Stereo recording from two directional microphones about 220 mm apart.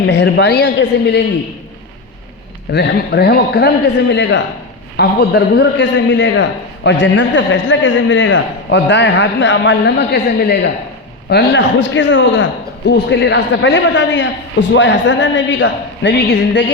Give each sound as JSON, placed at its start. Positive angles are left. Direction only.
{"t": 0.1, "sound": "a woman's voice", "side_deg": 50}
{"t": 2.7, "sound": "a woman's voice", "side_deg": 50}